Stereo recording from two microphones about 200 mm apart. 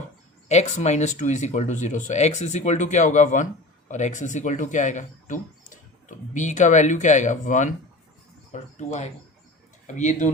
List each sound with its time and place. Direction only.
0.4 s speech: 35° left (ahead or behind)